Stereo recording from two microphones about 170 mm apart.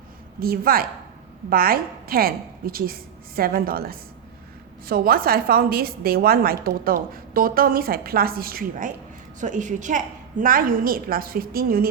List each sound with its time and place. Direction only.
0.3 s a woman's voice: 60° right (ahead or behind)
9.4 s a woman's voice: 50° right (ahead or behind)